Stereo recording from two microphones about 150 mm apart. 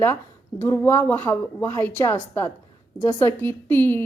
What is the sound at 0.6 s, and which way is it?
Speech, 15° left (ahead or behind).